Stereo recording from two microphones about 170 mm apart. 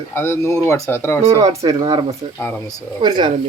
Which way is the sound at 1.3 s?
20° right (ahead or behind).